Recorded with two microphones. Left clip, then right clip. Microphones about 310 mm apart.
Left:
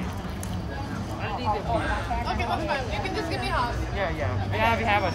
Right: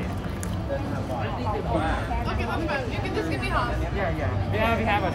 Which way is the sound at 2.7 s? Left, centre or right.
Left.